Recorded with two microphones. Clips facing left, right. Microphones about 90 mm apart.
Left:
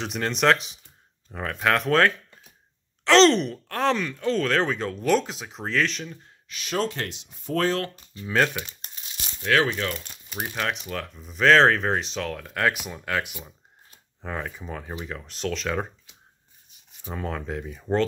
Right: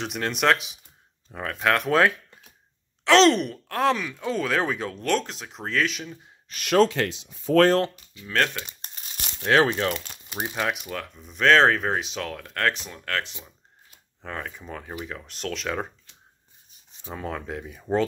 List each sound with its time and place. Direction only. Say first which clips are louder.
0.0 s speech: left 1 dB; centre (ahead or behind)
6.5 s speech: right 8 dB; 65° right (ahead or behind); by 7.0 s 80° right
7.9 s speech: left 6 dB; 35° left (ahead or behind)
8.3 s speech: left 2 dB; 5° left (ahead or behind)
9.4 s speech: right 2 dB; 30° right (ahead or behind)
10.3 s speech: right 1 dB; 10° right (ahead or behind)